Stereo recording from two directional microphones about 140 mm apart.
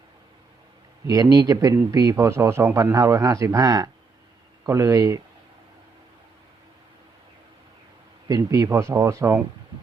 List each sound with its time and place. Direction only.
1.0 s a man's voice: 25° right (ahead or behind)
8.3 s a man's voice: 25° right (ahead or behind)